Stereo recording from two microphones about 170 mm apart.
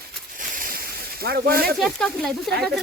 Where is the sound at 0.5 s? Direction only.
55° right (ahead or behind).